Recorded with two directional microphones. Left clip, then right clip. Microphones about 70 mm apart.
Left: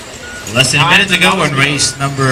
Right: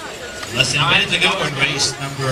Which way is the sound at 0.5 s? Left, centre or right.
Left.